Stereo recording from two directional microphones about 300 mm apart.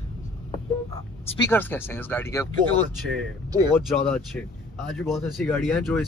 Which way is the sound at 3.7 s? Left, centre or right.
Centre.